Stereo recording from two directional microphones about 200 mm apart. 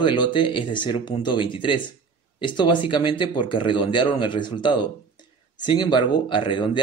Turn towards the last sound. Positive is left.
turn(degrees=25)  # may be behind; listen again after turning